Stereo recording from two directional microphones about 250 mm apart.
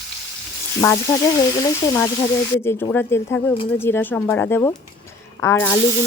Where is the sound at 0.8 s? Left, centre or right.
Centre.